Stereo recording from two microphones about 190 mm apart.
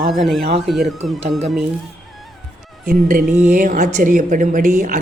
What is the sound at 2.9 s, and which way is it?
A woman's voice, 45° right (ahead or behind).